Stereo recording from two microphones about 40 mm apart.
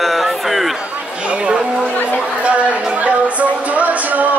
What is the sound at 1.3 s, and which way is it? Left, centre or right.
Speech, right.